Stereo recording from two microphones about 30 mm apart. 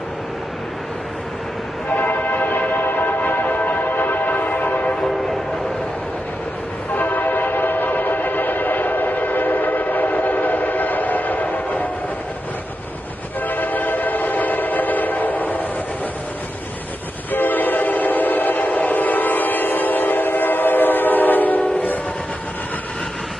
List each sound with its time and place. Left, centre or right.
2.0 s train: left
2.7 s a sound: left
3.2 s music: left
5.0 s train: centre
6.9 s train: left
13.5 s train: left
17.3 s train: left